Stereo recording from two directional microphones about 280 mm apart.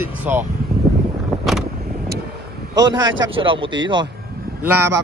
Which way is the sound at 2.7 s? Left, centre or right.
Centre.